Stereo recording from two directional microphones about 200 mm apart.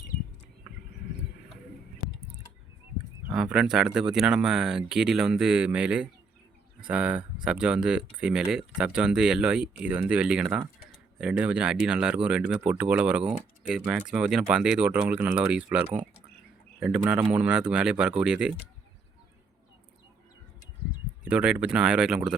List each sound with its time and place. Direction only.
3.2 s speech: centre (ahead or behind)
17.1 s speech: 5° right (ahead or behind)
21.2 s speech: 5° right (ahead or behind)